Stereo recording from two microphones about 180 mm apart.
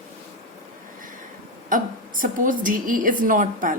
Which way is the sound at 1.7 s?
50° right (ahead or behind).